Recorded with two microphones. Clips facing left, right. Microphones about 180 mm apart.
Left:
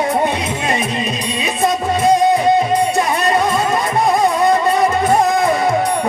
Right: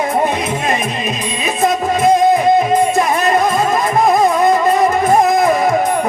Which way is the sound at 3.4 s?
30° left (ahead or behind).